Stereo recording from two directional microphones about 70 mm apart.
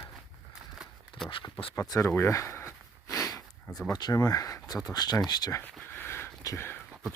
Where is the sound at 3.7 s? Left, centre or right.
Centre.